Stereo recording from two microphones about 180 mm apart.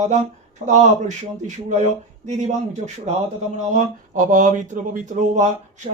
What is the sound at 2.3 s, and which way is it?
Speech, 40° right (ahead or behind).